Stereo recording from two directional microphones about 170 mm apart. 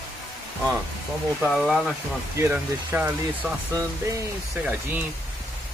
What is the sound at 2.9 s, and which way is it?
Speech, 10° right (ahead or behind).